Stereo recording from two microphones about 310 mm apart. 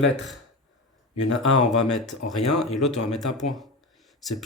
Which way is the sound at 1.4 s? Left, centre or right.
Left.